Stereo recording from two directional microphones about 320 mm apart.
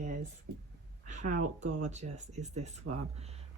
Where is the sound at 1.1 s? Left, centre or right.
Right.